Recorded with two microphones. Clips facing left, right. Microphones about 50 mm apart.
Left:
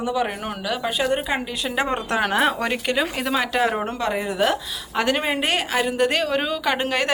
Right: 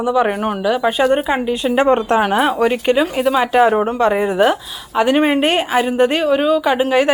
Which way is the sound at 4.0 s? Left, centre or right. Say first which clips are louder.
Right 8 dB; right.